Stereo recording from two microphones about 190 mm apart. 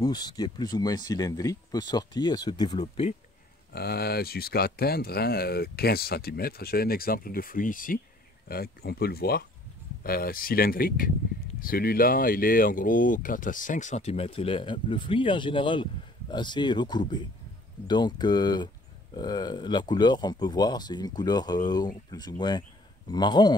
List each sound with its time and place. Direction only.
0.0 s speech: 20° left (ahead or behind)
3.7 s speech: 55° left (ahead or behind); by 23.5 s 20° left (ahead or behind)